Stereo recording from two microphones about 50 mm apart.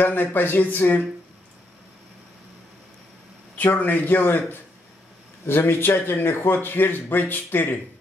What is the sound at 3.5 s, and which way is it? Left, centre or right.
Speech, left.